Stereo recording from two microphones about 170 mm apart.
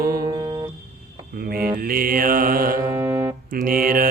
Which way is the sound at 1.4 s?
60° right (ahead or behind).